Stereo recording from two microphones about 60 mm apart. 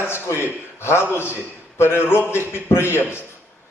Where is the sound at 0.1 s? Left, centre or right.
Left.